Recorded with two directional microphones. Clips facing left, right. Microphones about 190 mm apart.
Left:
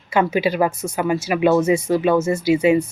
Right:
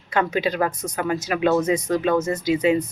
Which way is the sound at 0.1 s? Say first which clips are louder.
Left 4 dB; 10° left (ahead or behind).